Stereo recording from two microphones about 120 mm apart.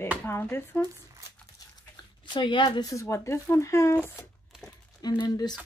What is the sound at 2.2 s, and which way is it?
Speech, 40° left (ahead or behind).